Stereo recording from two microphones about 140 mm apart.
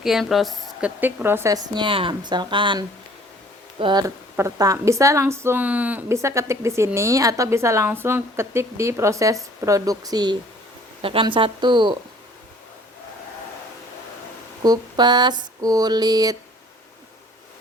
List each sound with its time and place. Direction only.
0.0 s a woman's voice: centre (ahead or behind); by 4.0 s 35° right (ahead or behind)
4.0 s a woman's voice: 20° right (ahead or behind)
14.6 s a woman's voice: 30° right (ahead or behind)